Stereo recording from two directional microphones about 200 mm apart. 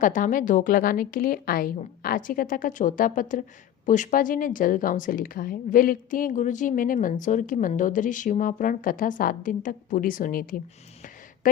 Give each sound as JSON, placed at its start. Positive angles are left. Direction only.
{"t": 0.0, "sound": "speech", "side_deg": 40}